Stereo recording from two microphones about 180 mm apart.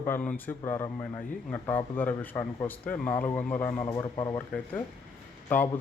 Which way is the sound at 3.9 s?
25° left (ahead or behind).